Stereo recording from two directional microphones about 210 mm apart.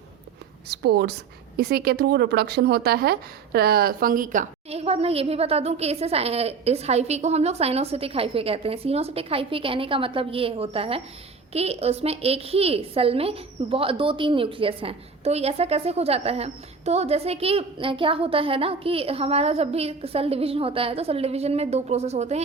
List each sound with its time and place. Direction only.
0.7 s a woman's voice: 50° right (ahead or behind); by 22.4 s 30° right (ahead or behind)